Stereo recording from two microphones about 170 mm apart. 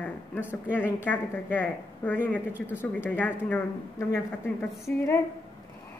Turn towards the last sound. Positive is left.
turn(degrees=15)  # may be behind; listen again after turning